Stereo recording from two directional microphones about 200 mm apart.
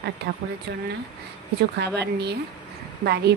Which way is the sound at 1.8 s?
55° right (ahead or behind).